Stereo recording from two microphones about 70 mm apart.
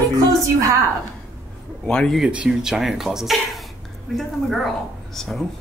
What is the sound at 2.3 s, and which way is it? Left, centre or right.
Speech, centre.